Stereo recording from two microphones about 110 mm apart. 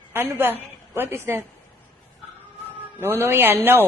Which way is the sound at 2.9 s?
20° right (ahead or behind).